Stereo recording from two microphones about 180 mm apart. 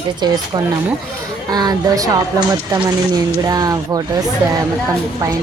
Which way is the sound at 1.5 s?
20° right (ahead or behind).